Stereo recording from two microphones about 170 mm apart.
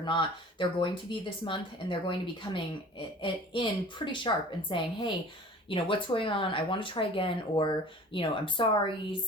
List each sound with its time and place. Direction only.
0.0 s speech: 30° left (ahead or behind)